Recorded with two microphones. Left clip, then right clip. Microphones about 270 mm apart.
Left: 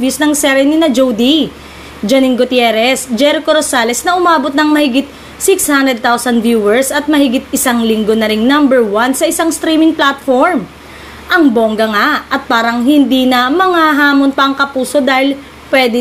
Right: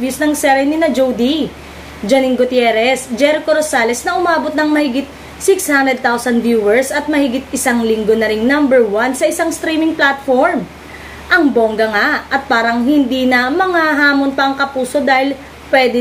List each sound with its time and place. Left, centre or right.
0.0 s a woman's voice: left